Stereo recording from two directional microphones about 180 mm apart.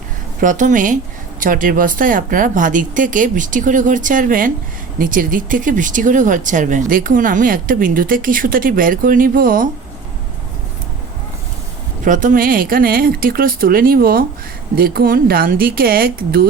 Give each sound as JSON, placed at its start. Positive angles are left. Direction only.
{"t": 0.3, "sound": "speech", "side_deg": -45}
{"t": 12.0, "sound": "speech", "side_deg": -45}